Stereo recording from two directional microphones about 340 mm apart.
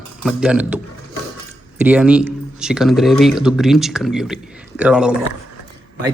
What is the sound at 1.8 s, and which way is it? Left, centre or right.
Speech, centre.